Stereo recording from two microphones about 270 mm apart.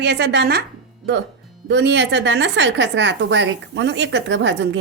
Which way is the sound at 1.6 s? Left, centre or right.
Right.